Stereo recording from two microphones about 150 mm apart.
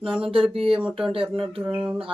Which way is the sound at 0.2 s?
35° right (ahead or behind).